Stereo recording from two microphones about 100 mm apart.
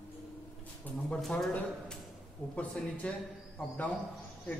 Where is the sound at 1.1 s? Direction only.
5° left (ahead or behind).